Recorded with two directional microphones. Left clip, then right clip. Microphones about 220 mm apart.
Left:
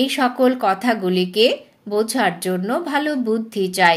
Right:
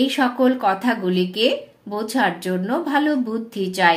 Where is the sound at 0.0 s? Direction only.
40° left (ahead or behind).